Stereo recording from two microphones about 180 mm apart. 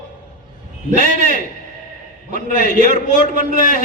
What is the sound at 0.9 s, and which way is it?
A man's voice, 50° right (ahead or behind).